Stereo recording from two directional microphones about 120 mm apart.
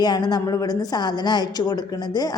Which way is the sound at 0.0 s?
35° left (ahead or behind).